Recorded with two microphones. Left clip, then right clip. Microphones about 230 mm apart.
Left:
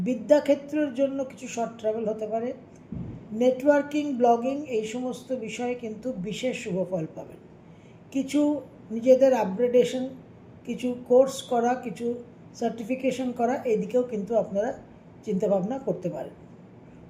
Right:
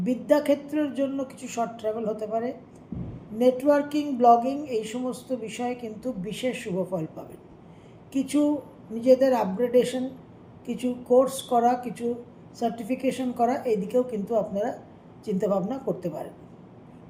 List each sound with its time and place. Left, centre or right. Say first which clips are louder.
0.0 s speech: left 1 dB; centre